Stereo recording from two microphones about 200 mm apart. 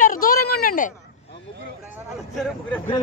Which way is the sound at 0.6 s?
40° left (ahead or behind).